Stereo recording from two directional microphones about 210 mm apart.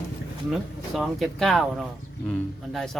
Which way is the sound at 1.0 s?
Centre (ahead or behind).